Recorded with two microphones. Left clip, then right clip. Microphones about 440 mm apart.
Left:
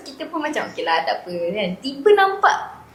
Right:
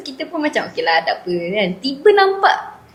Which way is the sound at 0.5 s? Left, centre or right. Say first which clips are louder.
Right 4 dB; right.